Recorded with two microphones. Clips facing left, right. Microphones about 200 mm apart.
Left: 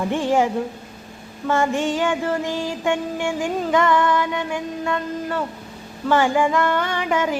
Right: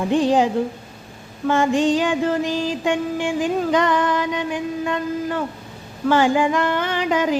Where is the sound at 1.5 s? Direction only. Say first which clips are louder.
Right 3 dB; 15° right (ahead or behind).